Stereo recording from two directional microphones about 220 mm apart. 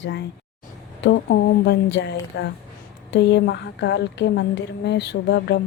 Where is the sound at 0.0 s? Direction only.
50° left (ahead or behind).